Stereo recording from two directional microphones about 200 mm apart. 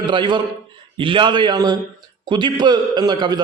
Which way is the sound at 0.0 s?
25° right (ahead or behind).